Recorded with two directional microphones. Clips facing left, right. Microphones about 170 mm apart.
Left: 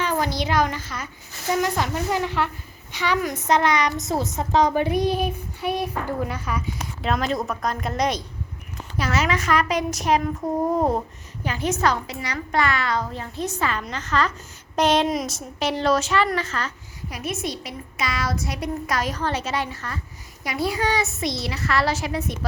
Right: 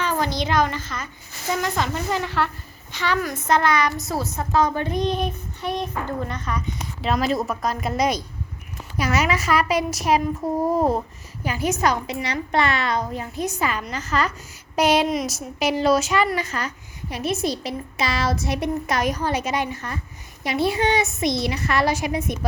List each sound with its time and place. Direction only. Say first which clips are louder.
0.0 s a woman's voice: even; 10° left (ahead or behind)
7.0 s a woman's voice: right 2 dB; 5° right (ahead or behind)
12.2 s a woman's voice: right 1 dB; 25° right (ahead or behind)
17.1 s a child's voice: right 5 dB; 30° right (ahead or behind)